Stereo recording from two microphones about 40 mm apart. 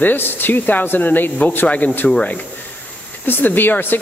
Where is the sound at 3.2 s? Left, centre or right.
Left.